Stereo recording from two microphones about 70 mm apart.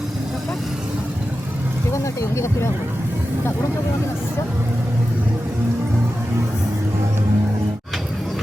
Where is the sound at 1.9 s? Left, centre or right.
Left.